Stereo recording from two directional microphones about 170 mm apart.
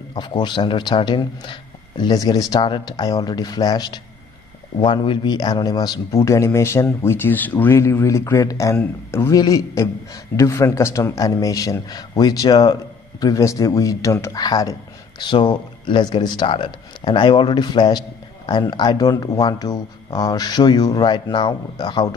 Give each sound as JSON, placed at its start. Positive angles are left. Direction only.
{"t": 0.1, "sound": "speech", "side_deg": 25}